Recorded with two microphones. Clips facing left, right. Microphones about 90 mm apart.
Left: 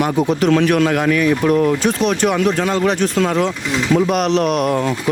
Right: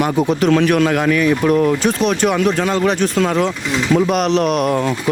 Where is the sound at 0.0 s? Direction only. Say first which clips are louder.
Even; 25° right (ahead or behind).